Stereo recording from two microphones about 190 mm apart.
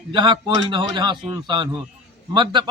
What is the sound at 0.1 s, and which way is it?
A man's voice, 25° right (ahead or behind).